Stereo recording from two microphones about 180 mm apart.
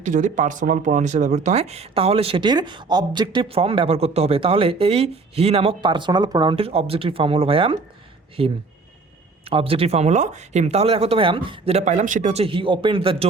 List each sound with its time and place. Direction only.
0.0 s speech: 45° right (ahead or behind)